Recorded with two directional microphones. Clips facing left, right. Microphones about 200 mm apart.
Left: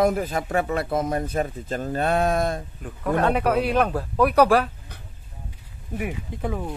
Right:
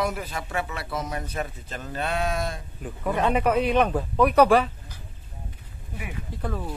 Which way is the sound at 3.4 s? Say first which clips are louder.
Even; 10° left (ahead or behind).